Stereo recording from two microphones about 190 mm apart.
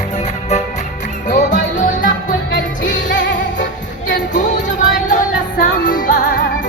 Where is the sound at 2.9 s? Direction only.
75° left (ahead or behind).